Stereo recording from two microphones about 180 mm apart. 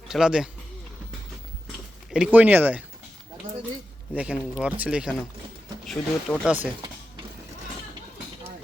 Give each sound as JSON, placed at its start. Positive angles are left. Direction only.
{"t": 0.1, "sound": "speech", "side_deg": -5}
{"t": 2.0, "sound": "speech", "side_deg": -5}
{"t": 4.1, "sound": "speech", "side_deg": -5}